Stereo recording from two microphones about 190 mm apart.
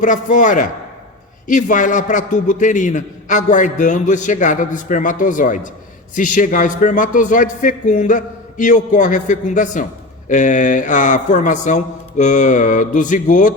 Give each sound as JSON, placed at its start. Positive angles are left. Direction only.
{"t": 0.0, "sound": "a man's voice", "side_deg": 45}